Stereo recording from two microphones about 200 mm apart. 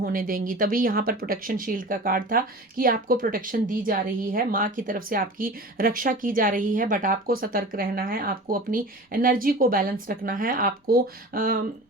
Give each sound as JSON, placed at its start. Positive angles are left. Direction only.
{"t": 0.0, "sound": "speech", "side_deg": -45}